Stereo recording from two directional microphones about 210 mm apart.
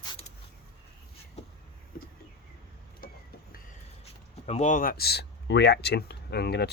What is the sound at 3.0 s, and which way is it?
Vehicle, 45° left (ahead or behind).